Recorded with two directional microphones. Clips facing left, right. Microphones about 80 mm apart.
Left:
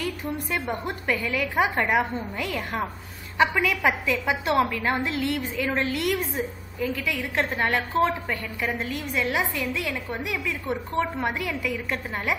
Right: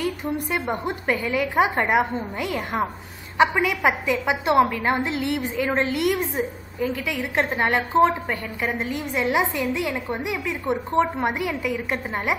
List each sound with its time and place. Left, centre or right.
0.0 s a woman's voice: right